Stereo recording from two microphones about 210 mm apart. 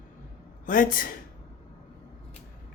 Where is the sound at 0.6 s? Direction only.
40° left (ahead or behind).